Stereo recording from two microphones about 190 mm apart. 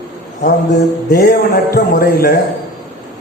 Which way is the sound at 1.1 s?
55° left (ahead or behind).